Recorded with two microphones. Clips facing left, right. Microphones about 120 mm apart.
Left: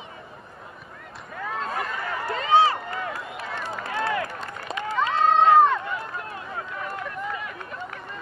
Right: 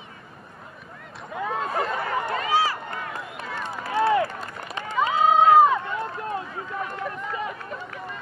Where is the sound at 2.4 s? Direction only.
25° left (ahead or behind).